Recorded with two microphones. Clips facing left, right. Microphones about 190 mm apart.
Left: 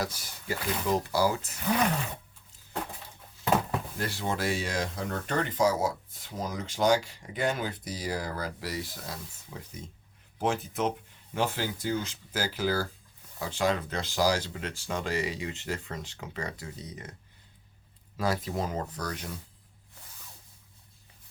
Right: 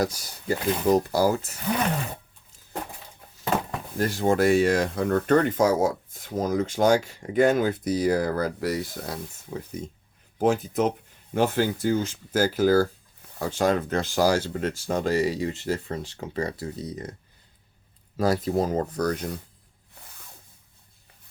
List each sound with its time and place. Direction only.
0.0 s speech: 40° right (ahead or behind)
3.9 s speech: 45° right (ahead or behind)
10.3 s speech: 40° right (ahead or behind)
18.2 s speech: 40° right (ahead or behind)